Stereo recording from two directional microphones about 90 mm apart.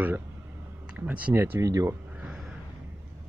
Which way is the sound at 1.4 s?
35° right (ahead or behind).